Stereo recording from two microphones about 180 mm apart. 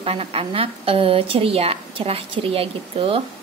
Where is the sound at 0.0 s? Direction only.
30° right (ahead or behind).